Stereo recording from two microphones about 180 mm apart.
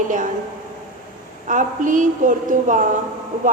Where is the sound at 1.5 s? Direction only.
45° right (ahead or behind).